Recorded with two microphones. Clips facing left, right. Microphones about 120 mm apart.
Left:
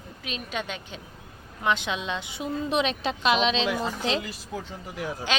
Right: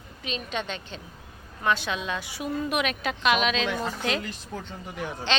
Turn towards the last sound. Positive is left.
turn(degrees=5)  # may be behind; listen again after turning